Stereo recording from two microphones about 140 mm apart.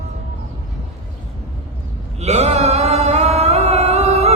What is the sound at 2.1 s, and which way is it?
Mantra, 50° right (ahead or behind).